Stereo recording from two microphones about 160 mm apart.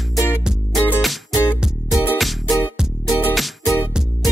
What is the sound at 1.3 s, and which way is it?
Music, 20° left (ahead or behind).